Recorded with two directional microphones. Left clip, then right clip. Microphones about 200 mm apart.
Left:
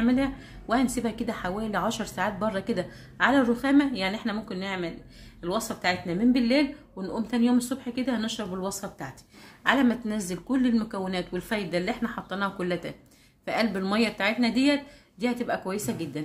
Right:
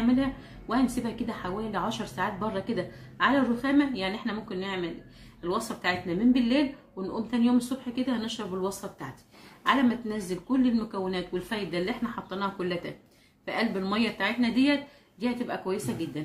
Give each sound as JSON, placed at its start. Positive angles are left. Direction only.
{"t": 0.0, "sound": "a woman's voice", "side_deg": 45}